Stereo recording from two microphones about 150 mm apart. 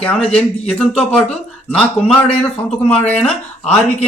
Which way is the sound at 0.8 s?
5° left (ahead or behind).